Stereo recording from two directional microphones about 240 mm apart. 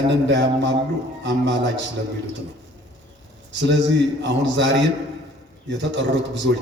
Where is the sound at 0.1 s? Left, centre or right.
Right.